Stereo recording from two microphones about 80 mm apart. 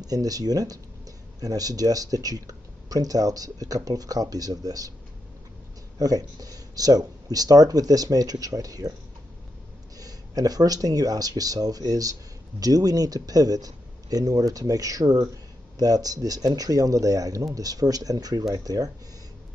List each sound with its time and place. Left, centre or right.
0.0 s speech: right
5.9 s speech: right
9.9 s speech: right